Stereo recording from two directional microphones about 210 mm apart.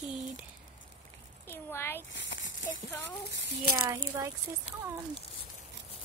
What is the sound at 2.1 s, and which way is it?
Rattle, 60° left (ahead or behind).